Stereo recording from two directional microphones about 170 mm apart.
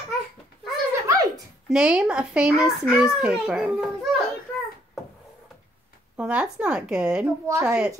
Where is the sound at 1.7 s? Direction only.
5° right (ahead or behind).